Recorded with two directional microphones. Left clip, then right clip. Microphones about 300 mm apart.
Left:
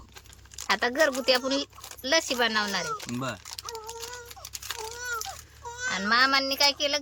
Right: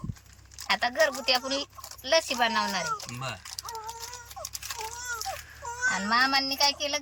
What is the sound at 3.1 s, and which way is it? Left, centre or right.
Speech, left.